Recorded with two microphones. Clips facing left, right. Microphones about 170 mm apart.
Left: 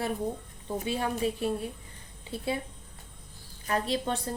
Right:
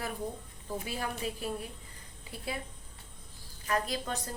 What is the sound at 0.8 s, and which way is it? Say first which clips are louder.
A woman's voice: left 8 dB; 25° left (ahead or behind).